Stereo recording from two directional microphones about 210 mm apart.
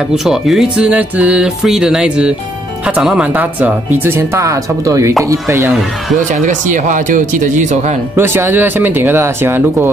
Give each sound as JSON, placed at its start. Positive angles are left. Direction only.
{"t": 0.1, "sound": "speech", "side_deg": 0}
{"t": 6.3, "sound": "speech", "side_deg": -35}
{"t": 8.2, "sound": "speech", "side_deg": -10}